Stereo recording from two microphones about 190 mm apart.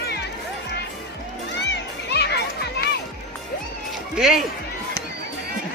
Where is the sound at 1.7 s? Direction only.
60° left (ahead or behind).